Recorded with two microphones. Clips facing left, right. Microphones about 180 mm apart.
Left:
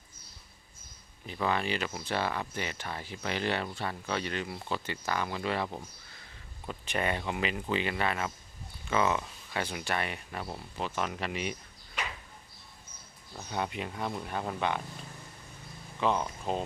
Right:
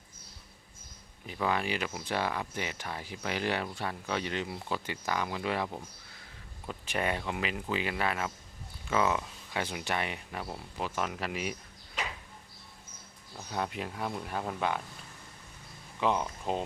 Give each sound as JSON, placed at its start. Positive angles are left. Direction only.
{"t": 1.3, "sound": "speech", "side_deg": -10}
{"t": 9.6, "sound": "speech", "side_deg": -15}
{"t": 13.3, "sound": "speech", "side_deg": 0}
{"t": 16.0, "sound": "speech", "side_deg": -15}